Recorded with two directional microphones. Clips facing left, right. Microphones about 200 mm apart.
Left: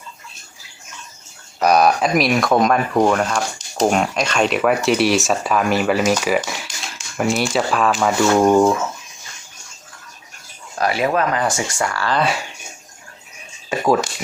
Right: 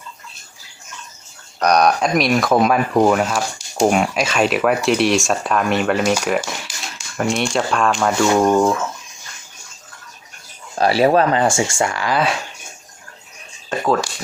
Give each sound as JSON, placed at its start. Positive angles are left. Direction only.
{"t": 1.5, "sound": "speech", "side_deg": 5}
{"t": 10.8, "sound": "speech", "side_deg": -30}
{"t": 12.1, "sound": "speech", "side_deg": 0}
{"t": 13.7, "sound": "speech", "side_deg": 10}